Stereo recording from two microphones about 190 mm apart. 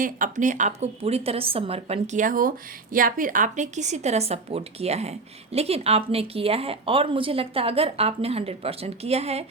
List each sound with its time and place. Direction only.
0.0 s a woman's voice: 45° right (ahead or behind)